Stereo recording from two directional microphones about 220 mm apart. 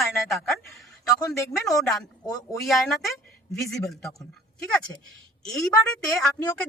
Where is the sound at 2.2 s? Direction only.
15° left (ahead or behind).